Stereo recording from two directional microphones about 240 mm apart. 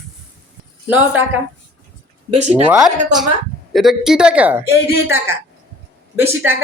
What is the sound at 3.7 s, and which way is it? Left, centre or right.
A woman's voice, centre.